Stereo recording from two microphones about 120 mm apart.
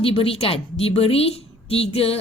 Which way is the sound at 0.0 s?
50° left (ahead or behind).